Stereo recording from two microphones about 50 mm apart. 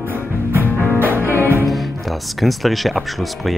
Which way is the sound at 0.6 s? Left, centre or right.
Left.